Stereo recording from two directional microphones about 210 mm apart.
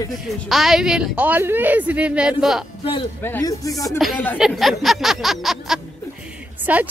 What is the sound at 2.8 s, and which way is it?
Speech, 25° left (ahead or behind).